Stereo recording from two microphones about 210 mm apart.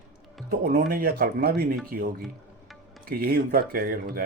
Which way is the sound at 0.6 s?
45° right (ahead or behind).